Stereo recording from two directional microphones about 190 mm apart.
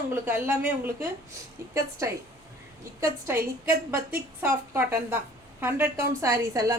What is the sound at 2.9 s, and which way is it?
A woman's voice, 15° right (ahead or behind).